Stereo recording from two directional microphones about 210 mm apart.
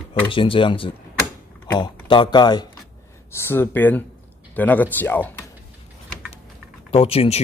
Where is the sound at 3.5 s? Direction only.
10° left (ahead or behind).